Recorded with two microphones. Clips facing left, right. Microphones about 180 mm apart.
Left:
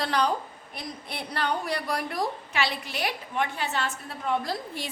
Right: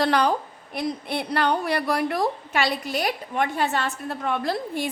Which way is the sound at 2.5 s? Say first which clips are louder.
Right 5 dB; 45° right (ahead or behind).